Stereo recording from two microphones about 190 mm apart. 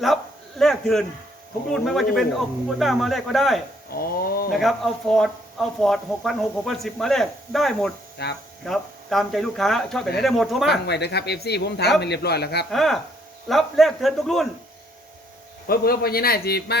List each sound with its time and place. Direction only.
0.6 s a sound: centre (ahead or behind)
1.7 s speech: centre (ahead or behind)
3.9 s a man's voice: 50° left (ahead or behind)
4.5 s speech: centre (ahead or behind)
8.2 s speech: 60° left (ahead or behind)
8.6 s speech: centre (ahead or behind)
10.7 s speech: 60° left (ahead or behind)
12.7 s speech: centre (ahead or behind)
15.6 s a man's voice: 50° left (ahead or behind)